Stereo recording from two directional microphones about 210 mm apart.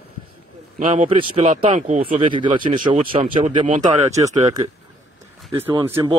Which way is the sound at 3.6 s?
35° right (ahead or behind).